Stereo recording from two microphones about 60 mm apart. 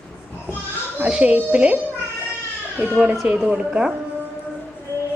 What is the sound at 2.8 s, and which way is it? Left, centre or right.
Speech, right.